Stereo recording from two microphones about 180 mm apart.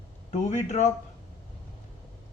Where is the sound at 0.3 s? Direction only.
40° left (ahead or behind).